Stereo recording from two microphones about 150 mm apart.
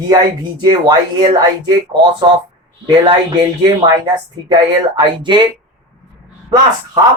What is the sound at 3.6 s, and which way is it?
Speech, 30° right (ahead or behind).